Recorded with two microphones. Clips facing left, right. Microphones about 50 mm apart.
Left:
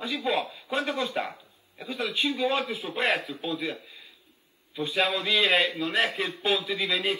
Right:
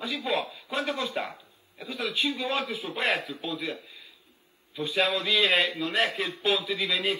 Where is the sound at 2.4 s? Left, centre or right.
Centre.